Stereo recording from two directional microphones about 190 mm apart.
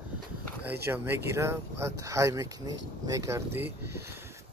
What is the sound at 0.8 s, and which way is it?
Speech, 10° right (ahead or behind).